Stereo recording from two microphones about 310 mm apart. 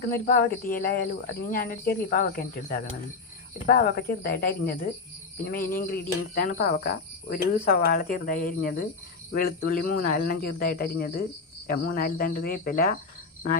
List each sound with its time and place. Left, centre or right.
0.0 s speech: left